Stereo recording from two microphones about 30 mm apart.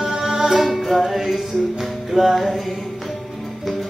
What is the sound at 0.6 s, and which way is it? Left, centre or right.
Music, centre.